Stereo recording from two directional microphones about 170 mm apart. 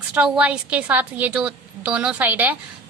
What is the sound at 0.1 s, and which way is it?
A woman's voice, 5° right (ahead or behind).